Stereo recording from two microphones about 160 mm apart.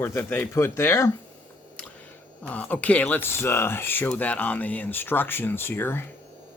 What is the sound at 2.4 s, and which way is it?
Speech, 10° left (ahead or behind).